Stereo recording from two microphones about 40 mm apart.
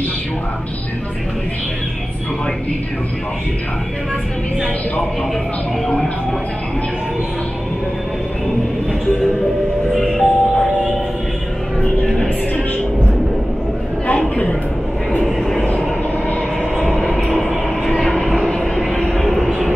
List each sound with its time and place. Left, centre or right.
10.1 s music: centre
15.2 s vehicle: centre
16.7 s train: centre
17.9 s vehicle: centre
18.6 s a sound: centre
18.9 s vehicle: centre
19.2 s vehicle: centre